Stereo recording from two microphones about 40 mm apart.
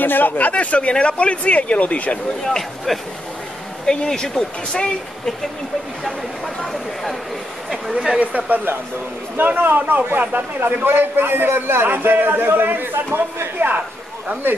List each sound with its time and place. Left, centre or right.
0.0 s speech: left
2.9 s speech: centre
3.8 s speech: centre
6.6 s speech: centre
7.7 s speech: centre
8.2 s speech: right
9.4 s a man's voice: right
13.6 s speech: right